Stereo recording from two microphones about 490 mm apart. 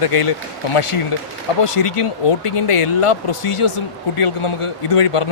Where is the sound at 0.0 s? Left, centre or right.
Left.